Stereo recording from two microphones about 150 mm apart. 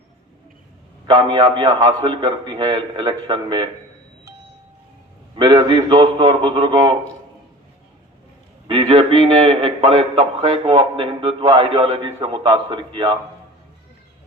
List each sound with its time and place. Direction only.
1.0 s a man's voice: 35° right (ahead or behind)
5.4 s a man's voice: 30° right (ahead or behind)
8.6 s a man's voice: 35° right (ahead or behind)